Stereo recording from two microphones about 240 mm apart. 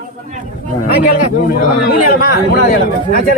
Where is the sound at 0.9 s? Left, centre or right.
Left.